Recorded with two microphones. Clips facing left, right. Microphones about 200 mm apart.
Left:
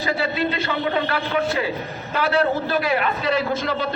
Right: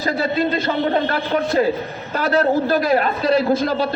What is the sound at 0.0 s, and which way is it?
A man's voice, 40° right (ahead or behind).